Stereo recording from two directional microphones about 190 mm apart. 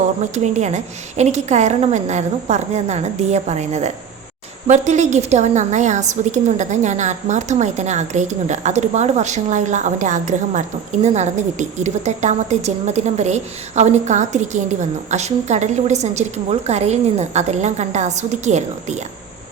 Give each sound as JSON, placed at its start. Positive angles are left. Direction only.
{"t": 0.2, "sound": "a woman's voice", "side_deg": -40}